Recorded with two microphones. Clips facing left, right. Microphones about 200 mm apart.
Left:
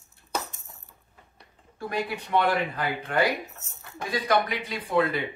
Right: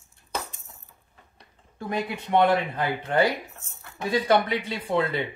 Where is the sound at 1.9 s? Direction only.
20° right (ahead or behind).